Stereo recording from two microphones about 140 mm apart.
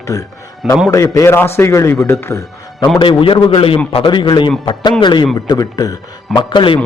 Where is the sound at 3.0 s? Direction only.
40° left (ahead or behind).